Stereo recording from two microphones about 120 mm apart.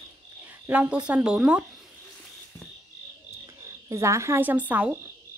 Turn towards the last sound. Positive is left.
turn(degrees=-10)  # may be behind; listen again after turning